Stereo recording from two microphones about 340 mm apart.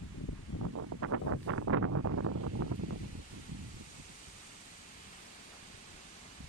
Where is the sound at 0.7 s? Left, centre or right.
Right.